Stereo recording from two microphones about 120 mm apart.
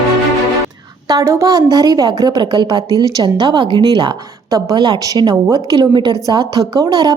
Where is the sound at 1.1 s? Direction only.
25° right (ahead or behind).